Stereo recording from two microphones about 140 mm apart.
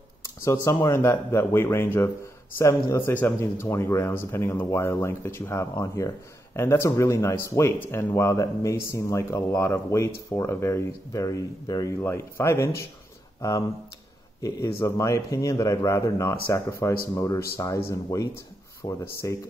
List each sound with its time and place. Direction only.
0.4 s a man's voice: 20° left (ahead or behind)